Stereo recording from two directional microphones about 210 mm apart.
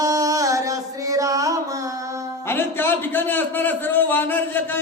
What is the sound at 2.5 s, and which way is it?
A man's voice, 10° left (ahead or behind).